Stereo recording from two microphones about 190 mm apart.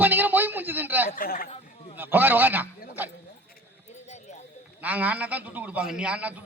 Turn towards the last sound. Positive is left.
turn(degrees=-5)  # may be behind; listen again after turning